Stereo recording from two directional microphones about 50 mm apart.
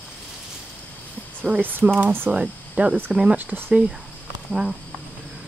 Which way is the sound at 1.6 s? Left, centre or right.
Right.